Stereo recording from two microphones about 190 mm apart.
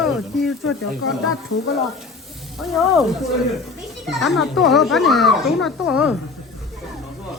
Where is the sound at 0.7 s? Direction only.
90° left.